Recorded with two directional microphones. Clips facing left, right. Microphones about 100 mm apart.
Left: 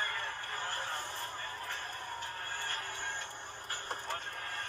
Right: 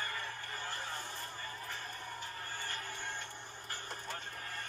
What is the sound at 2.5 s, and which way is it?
Music, 50° left (ahead or behind).